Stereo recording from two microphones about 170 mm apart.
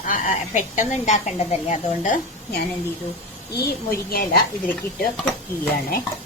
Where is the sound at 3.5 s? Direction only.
65° left (ahead or behind).